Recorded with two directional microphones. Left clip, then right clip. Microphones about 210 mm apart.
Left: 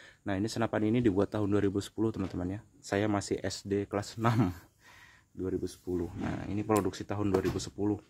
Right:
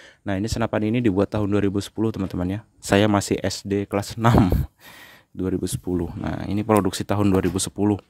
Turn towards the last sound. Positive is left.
turn(degrees=-55)  # may be behind; listen again after turning